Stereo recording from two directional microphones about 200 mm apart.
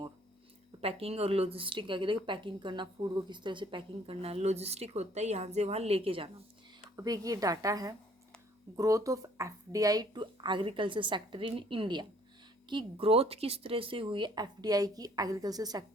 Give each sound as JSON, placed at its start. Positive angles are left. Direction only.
{"t": 0.8, "sound": "speech", "side_deg": -30}
{"t": 6.9, "sound": "a woman's voice", "side_deg": -15}